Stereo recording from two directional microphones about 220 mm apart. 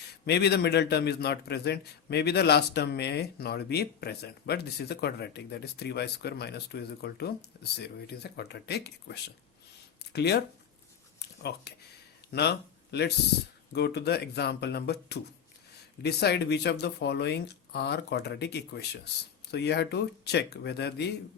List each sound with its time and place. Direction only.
0.3 s a man's voice: 50° left (ahead or behind)
11.2 s a sound: 50° left (ahead or behind)
12.3 s a man's voice: 50° left (ahead or behind)